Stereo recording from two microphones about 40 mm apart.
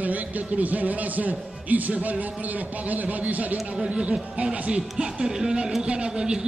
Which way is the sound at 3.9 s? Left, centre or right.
Right.